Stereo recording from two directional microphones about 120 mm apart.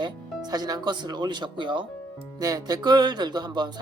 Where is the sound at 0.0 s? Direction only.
35° right (ahead or behind).